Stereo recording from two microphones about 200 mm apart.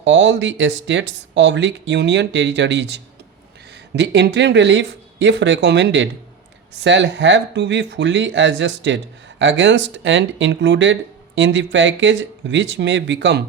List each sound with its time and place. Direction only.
0.0 s speech: 65° right (ahead or behind)